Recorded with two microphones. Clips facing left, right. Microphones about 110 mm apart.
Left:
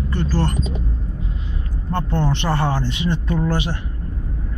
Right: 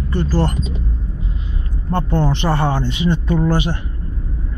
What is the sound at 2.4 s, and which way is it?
Speech, 20° right (ahead or behind).